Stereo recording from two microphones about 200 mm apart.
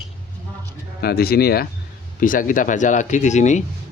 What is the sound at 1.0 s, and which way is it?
Speech, 50° left (ahead or behind).